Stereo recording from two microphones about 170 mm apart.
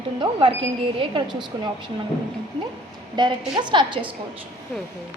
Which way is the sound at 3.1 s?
25° right (ahead or behind).